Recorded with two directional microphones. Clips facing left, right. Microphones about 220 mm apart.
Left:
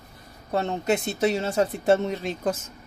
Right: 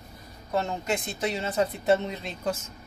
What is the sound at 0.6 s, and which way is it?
Speech, 40° left (ahead or behind).